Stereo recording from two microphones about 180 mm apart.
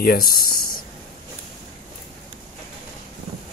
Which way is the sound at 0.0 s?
55° left (ahead or behind).